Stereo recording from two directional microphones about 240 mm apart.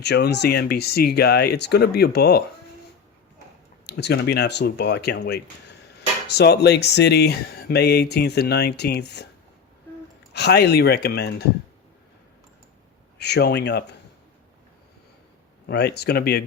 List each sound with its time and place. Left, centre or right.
0.0 s speech: left
3.8 s speech: left
10.3 s speech: left
13.1 s speech: left
15.6 s speech: left